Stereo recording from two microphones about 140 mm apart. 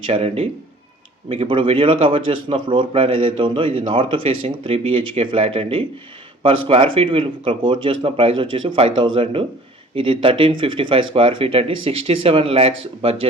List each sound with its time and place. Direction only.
0.0 s a man's voice: 45° right (ahead or behind)